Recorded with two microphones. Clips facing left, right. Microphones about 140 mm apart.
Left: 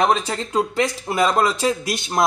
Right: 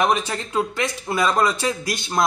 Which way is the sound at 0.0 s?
30° left (ahead or behind).